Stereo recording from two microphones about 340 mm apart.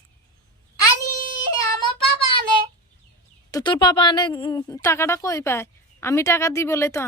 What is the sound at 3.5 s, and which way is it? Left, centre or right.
A woman's voice, centre.